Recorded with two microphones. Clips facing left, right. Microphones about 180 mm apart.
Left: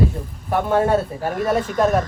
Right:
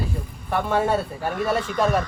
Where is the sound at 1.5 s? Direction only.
45° left (ahead or behind).